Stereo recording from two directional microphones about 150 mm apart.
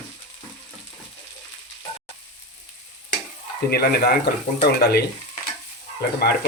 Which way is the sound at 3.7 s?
90° left.